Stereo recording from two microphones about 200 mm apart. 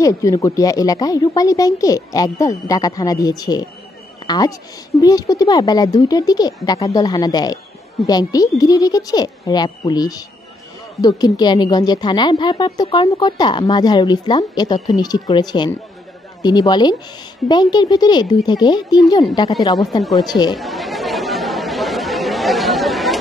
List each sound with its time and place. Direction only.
0.0 s a woman's voice: 15° left (ahead or behind)
20.0 s speech: centre (ahead or behind)
20.5 s chatter: centre (ahead or behind)